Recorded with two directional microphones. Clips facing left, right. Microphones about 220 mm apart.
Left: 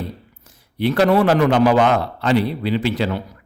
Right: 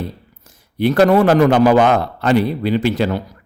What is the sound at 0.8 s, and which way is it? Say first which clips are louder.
A man's voice: right 3 dB; 45° right (ahead or behind).